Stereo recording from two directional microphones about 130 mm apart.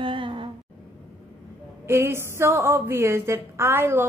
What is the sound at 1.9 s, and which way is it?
A woman's voice, 20° right (ahead or behind).